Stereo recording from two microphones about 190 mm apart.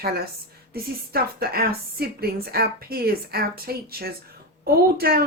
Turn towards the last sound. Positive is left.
turn(degrees=-50)  # may be behind; listen again after turning